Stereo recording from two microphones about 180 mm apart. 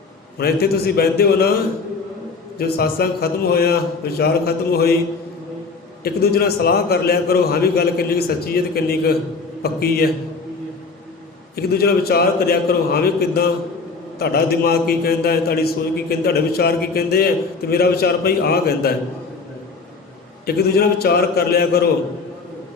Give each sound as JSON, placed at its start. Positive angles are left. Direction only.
{"t": 0.3, "sound": "a man's voice", "side_deg": 60}
{"t": 6.0, "sound": "a man's voice", "side_deg": 60}
{"t": 11.5, "sound": "a man's voice", "side_deg": 60}
{"t": 20.5, "sound": "a man's voice", "side_deg": 60}